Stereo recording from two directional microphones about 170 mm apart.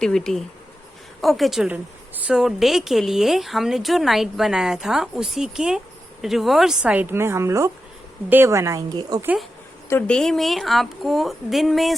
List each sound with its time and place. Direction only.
0.0 s a woman's voice: 5° left (ahead or behind); by 9.2 s 20° right (ahead or behind)
9.2 s a woman's voice: 5° right (ahead or behind)